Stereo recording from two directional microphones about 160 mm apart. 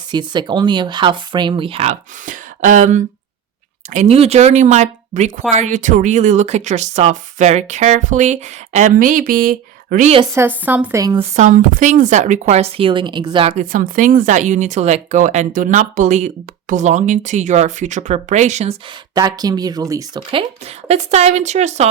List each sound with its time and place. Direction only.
0.1 s speech: 25° right (ahead or behind); by 10.1 s 65° right (ahead or behind)
10.3 s speech: 15° right (ahead or behind)
11.2 s speech: 50° right (ahead or behind)
13.7 s speech: 55° right (ahead or behind)
19.1 s speech: 25° right (ahead or behind); by 21.8 s 45° right (ahead or behind)